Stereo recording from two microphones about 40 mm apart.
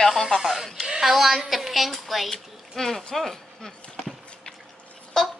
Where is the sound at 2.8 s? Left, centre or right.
Centre.